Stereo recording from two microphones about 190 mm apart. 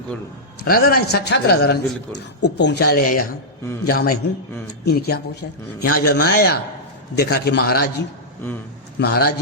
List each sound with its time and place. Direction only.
0.6 s a man's voice: 50° left (ahead or behind)